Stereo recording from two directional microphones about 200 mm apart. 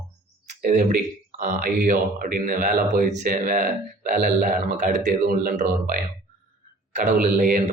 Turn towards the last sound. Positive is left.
turn(degrees=-40)  # may be behind; listen again after turning